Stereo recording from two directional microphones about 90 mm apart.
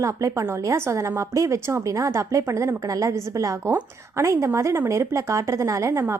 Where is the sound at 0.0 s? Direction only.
35° right (ahead or behind).